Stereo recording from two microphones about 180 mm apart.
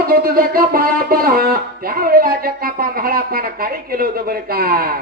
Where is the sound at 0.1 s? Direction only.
55° right (ahead or behind).